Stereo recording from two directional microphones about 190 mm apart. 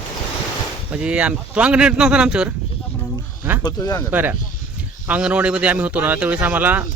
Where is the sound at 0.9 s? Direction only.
5° right (ahead or behind).